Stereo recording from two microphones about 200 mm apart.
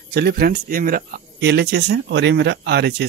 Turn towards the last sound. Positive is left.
turn(degrees=-55)  # may be behind; listen again after turning